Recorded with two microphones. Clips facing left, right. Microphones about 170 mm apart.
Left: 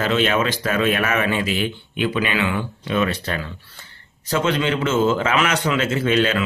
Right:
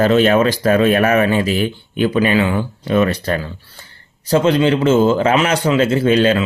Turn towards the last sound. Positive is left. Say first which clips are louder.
# right 6 dB
turn(degrees=-35)  # may be behind; listen again after turning